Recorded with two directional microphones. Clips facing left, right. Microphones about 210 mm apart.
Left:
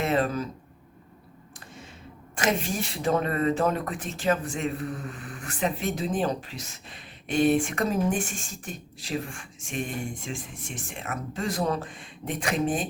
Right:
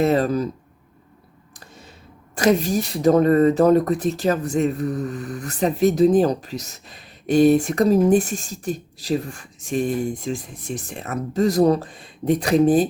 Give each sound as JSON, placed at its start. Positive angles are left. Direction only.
{"t": 0.0, "sound": "speech", "side_deg": -40}
{"t": 1.5, "sound": "a sound", "side_deg": -40}
{"t": 2.3, "sound": "speech", "side_deg": -40}